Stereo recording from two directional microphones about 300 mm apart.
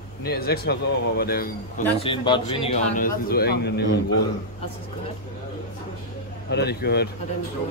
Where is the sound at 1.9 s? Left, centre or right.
Centre; by 4.3 s left.